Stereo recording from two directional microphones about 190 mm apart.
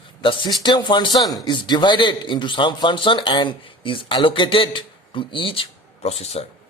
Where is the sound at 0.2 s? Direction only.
25° left (ahead or behind).